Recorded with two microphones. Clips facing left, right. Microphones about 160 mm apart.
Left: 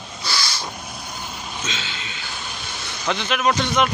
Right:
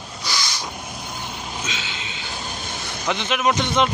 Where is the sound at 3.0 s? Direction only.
20° right (ahead or behind).